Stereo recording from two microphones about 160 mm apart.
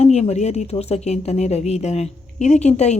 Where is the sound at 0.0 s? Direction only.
40° left (ahead or behind).